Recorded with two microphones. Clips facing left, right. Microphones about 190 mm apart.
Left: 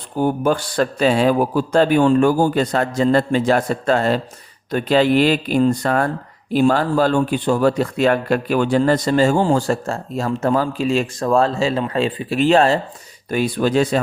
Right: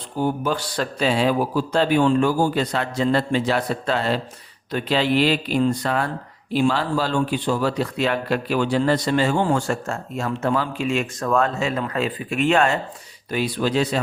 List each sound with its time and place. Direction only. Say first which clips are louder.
0.2 s a man's voice: left 5 dB; 50° left (ahead or behind); by 12.8 s 35° left (ahead or behind)
13.3 s a man's voice: left 4 dB; 50° left (ahead or behind)